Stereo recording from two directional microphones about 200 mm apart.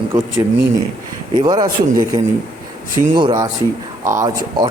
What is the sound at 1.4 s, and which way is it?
Speech, 20° right (ahead or behind).